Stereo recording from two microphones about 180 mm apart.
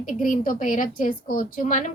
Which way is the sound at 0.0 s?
50° left (ahead or behind).